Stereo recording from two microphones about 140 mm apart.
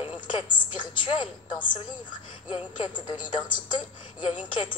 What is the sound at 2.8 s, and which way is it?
A woman's voice, 35° left (ahead or behind).